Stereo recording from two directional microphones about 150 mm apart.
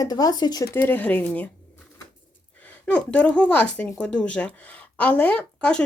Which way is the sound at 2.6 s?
10° left (ahead or behind).